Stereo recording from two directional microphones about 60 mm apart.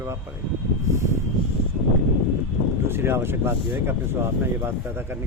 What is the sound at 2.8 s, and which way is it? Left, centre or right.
Speech, right.